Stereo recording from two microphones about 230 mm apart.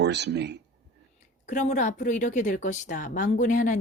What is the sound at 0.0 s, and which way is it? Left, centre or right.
Speech, right.